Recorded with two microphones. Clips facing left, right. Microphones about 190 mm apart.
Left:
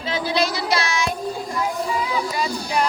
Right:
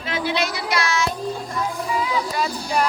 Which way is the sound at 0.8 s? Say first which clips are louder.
Right 1 dB; 15° left (ahead or behind).